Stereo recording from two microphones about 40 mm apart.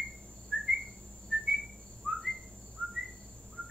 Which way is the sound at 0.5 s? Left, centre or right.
Centre.